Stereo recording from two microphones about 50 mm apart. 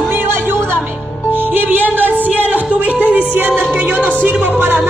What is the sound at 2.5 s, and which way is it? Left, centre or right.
Speech, right.